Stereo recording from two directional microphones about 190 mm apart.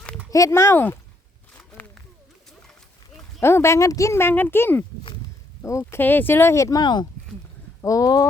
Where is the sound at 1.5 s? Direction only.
10° left (ahead or behind).